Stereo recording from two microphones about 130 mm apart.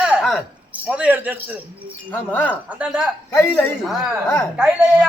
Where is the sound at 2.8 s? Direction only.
5° right (ahead or behind).